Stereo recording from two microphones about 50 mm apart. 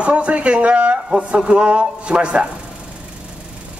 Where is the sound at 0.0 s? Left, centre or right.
Right.